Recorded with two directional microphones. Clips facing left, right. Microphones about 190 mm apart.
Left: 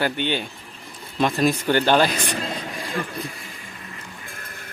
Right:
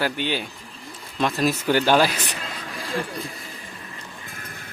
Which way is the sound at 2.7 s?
Centre (ahead or behind).